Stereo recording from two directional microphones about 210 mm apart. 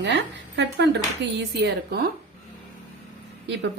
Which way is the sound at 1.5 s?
50° right (ahead or behind).